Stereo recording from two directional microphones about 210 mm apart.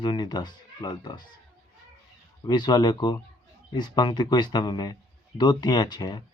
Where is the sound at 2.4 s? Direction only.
20° left (ahead or behind).